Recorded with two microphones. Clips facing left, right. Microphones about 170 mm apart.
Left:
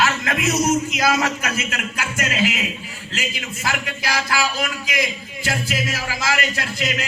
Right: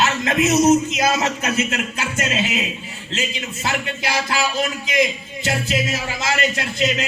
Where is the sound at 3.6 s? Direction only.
25° right (ahead or behind).